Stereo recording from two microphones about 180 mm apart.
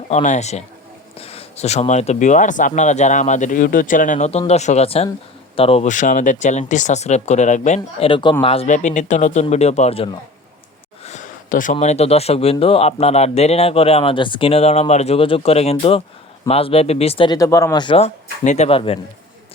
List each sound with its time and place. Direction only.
0.1 s speech: 40° left (ahead or behind)